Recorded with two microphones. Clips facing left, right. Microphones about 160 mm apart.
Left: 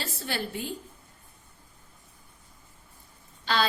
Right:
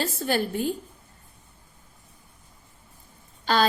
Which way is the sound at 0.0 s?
45° right (ahead or behind).